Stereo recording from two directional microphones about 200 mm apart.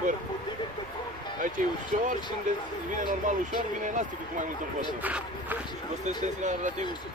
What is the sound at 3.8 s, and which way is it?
Speech, 40° right (ahead or behind).